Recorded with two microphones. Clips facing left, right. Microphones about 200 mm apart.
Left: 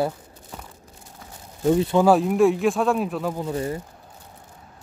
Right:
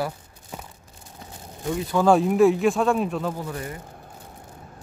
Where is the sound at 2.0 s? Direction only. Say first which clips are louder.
Right 2 dB; centre (ahead or behind).